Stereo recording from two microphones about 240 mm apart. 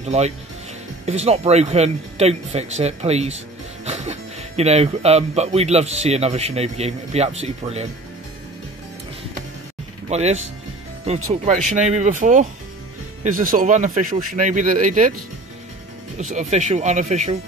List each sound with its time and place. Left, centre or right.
0.0 s speech: right
10.0 s speech: right
16.2 s speech: right